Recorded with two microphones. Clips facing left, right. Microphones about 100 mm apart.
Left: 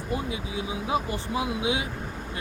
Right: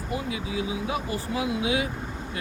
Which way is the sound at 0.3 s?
30° left (ahead or behind).